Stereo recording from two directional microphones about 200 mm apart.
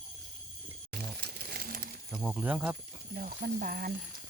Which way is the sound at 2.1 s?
5° right (ahead or behind).